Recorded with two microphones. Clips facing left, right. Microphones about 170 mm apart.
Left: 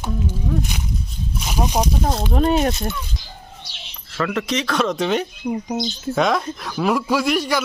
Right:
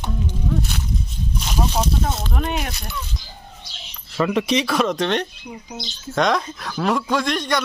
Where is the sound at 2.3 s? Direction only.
30° left (ahead or behind).